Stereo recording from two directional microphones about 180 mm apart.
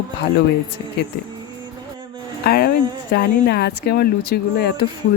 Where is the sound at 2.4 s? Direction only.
60° left (ahead or behind).